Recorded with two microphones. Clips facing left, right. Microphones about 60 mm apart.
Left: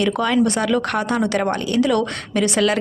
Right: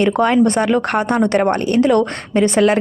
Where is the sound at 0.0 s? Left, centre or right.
Right.